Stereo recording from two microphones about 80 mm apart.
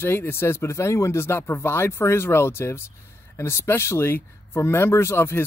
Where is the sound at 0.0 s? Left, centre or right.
Left.